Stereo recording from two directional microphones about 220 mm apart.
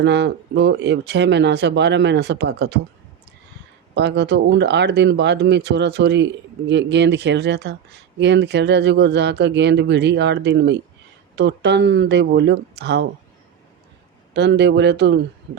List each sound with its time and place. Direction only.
0.0 s speech: 50° right (ahead or behind)
3.9 s speech: 50° right (ahead or behind)
14.3 s speech: 50° right (ahead or behind)